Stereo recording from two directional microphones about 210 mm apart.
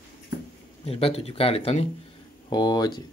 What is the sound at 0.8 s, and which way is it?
Speech, 30° left (ahead or behind).